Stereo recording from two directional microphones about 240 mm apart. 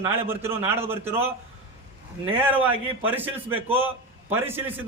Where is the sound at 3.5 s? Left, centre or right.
Right.